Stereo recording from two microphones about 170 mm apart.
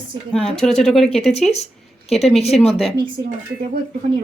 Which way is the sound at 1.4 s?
40° left (ahead or behind).